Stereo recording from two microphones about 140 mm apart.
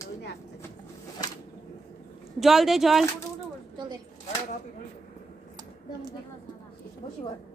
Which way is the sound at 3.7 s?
30° right (ahead or behind).